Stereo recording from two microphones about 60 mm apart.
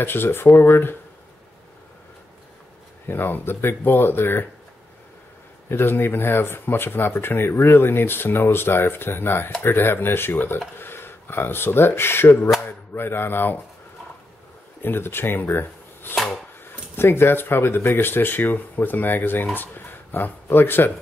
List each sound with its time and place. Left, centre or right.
0.0 s speech: left
3.1 s speech: left
5.7 s speech: left
14.8 s speech: left